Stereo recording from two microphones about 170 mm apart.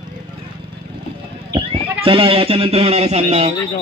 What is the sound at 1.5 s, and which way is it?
Speech, 30° right (ahead or behind).